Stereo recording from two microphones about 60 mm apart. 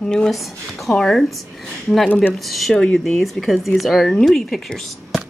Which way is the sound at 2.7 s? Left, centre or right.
Centre.